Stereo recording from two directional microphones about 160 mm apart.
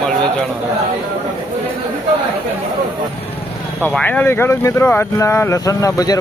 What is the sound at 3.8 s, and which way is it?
Speech, 10° left (ahead or behind).